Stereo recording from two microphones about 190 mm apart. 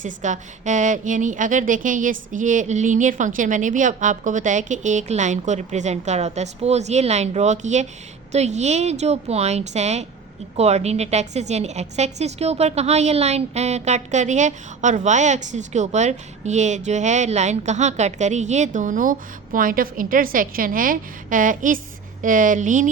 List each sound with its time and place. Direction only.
0.0 s a woman's voice: 40° right (ahead or behind)